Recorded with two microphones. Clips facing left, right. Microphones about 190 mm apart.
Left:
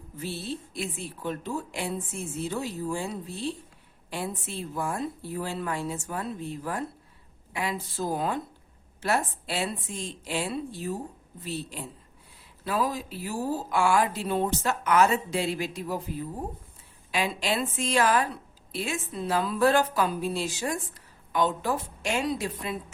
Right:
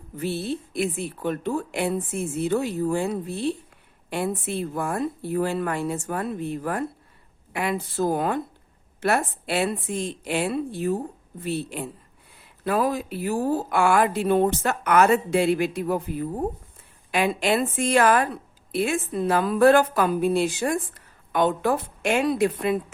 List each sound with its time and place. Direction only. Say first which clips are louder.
0.2 s a woman's voice: right 7 dB; 60° right (ahead or behind)